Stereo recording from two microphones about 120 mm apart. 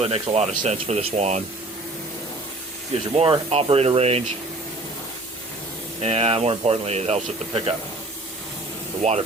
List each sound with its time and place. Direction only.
0.0 s speech: 60° right (ahead or behind)
3.2 s speech: 55° right (ahead or behind)
6.0 s speech: 60° right (ahead or behind)
9.0 s speech: 65° right (ahead or behind)